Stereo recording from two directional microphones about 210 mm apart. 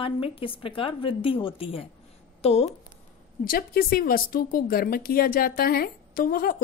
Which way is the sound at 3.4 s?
45° left (ahead or behind).